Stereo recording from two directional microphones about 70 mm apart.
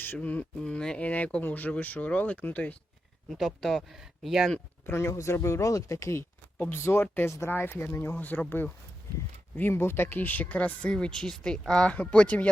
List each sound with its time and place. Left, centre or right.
0.2 s speech: left
0.6 s speech: centre
3.2 s speech: centre
3.9 s speech: centre
4.9 s speech: left
6.6 s speech: left
7.5 s speech: left
8.1 s speech: left